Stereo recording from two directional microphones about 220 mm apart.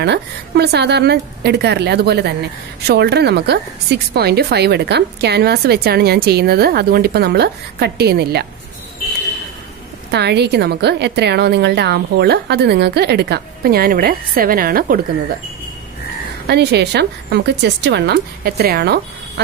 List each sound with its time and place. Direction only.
0.0 s a woman's voice: 50° right (ahead or behind)
10.1 s a woman's voice: 50° right (ahead or behind)
16.4 s a woman's voice: 50° right (ahead or behind)